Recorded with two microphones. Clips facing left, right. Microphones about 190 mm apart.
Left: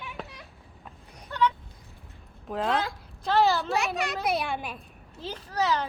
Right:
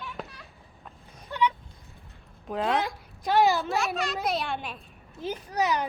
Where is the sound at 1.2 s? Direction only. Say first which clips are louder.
Left 1 dB; 15° right (ahead or behind).